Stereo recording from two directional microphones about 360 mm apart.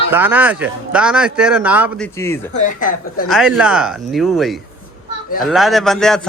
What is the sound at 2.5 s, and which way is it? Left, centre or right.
Speech, left.